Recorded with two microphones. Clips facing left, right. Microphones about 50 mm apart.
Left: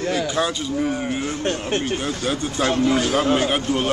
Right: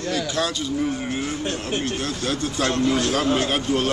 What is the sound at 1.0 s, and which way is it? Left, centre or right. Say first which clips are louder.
Speech: left 2 dB; centre.